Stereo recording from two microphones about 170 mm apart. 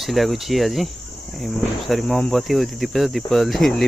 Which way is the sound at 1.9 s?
Centre (ahead or behind).